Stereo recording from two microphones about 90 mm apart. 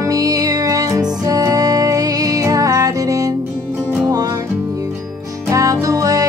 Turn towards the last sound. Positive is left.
turn(degrees=-40)  # may be behind; listen again after turning